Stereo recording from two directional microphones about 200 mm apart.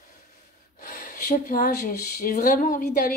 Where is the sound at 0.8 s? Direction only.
50° left (ahead or behind).